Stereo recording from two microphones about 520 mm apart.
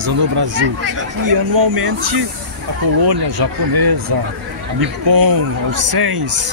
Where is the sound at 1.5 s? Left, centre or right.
Right.